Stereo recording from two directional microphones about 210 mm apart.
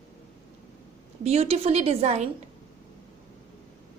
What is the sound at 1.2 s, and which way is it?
A woman's voice, 30° right (ahead or behind).